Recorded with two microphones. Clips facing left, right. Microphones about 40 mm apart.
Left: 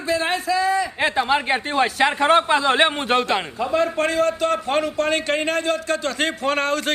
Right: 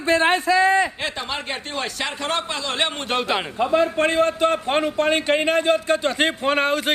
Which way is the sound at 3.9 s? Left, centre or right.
Right.